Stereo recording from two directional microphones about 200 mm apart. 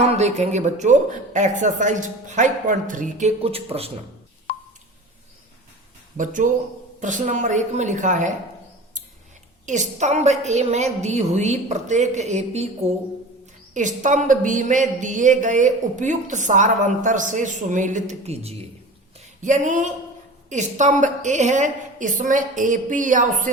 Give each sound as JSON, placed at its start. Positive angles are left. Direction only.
{"t": 0.2, "sound": "speech", "side_deg": -35}
{"t": 6.1, "sound": "speech", "side_deg": -40}
{"t": 9.6, "sound": "speech", "side_deg": -35}
{"t": 13.7, "sound": "speech", "side_deg": -40}